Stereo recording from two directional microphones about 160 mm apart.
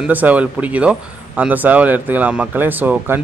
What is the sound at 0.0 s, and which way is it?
Speech, 10° right (ahead or behind).